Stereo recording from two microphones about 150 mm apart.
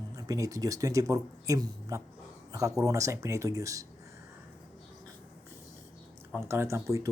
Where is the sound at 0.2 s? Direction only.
25° right (ahead or behind).